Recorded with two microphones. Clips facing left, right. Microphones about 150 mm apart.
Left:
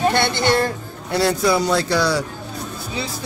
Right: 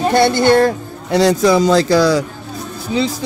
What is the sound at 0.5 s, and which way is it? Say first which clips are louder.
Speech: right 7 dB; 85° right.